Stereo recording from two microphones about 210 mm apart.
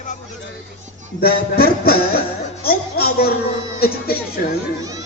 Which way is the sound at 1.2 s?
45° left (ahead or behind).